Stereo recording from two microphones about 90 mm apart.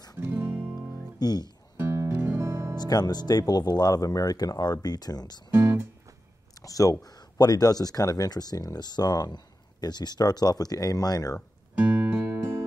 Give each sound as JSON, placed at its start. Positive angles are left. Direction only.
{"t": 0.2, "sound": "music", "side_deg": -25}
{"t": 1.2, "sound": "speech", "side_deg": 50}
{"t": 1.8, "sound": "music", "side_deg": -25}
{"t": 2.8, "sound": "speech", "side_deg": 50}
{"t": 5.5, "sound": "music", "side_deg": -25}
{"t": 6.5, "sound": "speech", "side_deg": 40}
{"t": 11.8, "sound": "music", "side_deg": -15}
{"t": 12.3, "sound": "music", "side_deg": -30}